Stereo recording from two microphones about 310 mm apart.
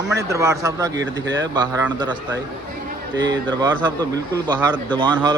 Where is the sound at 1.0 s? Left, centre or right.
Right.